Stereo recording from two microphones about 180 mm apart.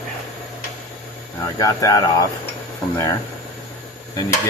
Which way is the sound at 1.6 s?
20° left (ahead or behind).